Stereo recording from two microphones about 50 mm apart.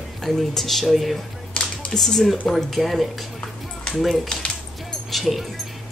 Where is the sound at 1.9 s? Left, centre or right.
Centre.